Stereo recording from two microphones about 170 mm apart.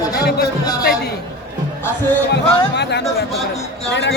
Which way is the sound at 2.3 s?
85° left.